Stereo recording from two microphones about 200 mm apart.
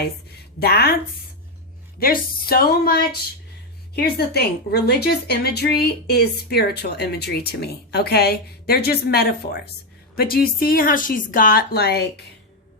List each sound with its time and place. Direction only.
0.0 s a woman's voice: 50° left (ahead or behind)
2.0 s a woman's voice: 50° left (ahead or behind)